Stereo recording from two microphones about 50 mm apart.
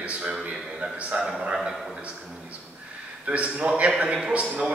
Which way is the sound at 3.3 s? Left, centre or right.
Right.